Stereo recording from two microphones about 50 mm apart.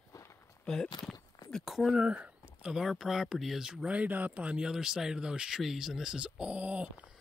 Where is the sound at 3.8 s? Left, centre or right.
Right.